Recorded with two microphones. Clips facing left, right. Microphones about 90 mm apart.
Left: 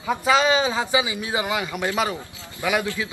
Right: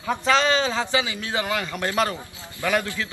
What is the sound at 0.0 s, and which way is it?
A man's voice, 10° left (ahead or behind).